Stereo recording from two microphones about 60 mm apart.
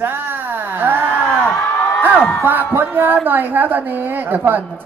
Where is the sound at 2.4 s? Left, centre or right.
Right.